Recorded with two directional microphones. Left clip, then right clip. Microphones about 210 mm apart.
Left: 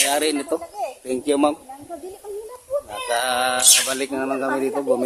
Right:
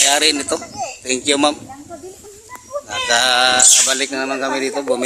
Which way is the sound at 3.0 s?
Centre (ahead or behind).